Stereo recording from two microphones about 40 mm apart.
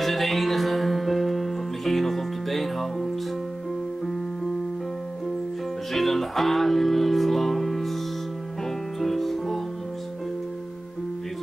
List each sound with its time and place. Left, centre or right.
0.0 s music: centre
5.9 s music: centre
9.0 s music: centre